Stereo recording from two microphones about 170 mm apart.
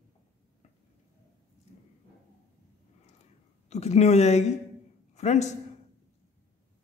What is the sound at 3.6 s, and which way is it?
A man's voice, 40° left (ahead or behind).